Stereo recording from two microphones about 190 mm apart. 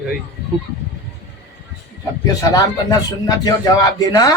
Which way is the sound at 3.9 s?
20° left (ahead or behind).